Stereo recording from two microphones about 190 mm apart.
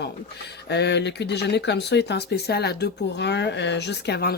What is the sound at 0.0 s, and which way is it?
Speech, 60° left (ahead or behind).